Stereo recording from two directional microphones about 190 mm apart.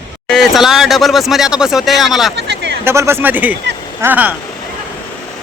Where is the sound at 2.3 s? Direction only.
65° right (ahead or behind).